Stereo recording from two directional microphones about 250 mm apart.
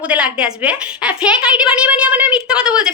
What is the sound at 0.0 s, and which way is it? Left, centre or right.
A woman's voice, centre.